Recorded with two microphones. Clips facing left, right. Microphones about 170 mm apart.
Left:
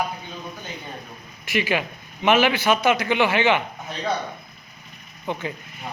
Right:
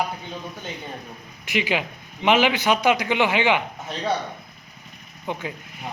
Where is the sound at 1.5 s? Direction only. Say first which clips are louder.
Left 1 dB; 15° right (ahead or behind).